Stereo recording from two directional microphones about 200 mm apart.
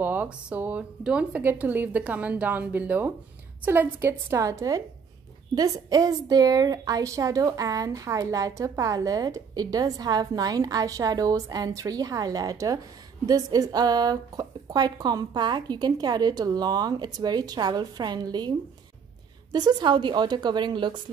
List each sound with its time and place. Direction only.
0.0 s a woman's voice: 10° right (ahead or behind)
19.5 s speech: 20° right (ahead or behind)